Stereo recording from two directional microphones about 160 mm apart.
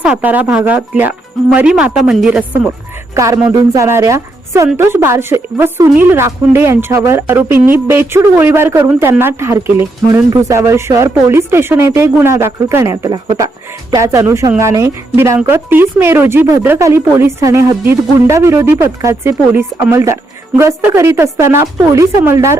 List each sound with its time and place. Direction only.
0.0 s a woman's voice: 10° right (ahead or behind)
3.2 s a woman's voice: 20° right (ahead or behind)